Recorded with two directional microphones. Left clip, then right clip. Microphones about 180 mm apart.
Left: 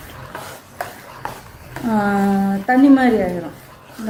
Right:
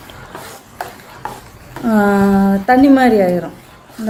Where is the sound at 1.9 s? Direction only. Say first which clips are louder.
Right 5 dB; 50° right (ahead or behind).